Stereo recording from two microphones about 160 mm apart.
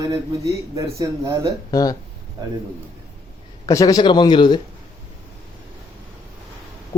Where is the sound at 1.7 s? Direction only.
20° left (ahead or behind).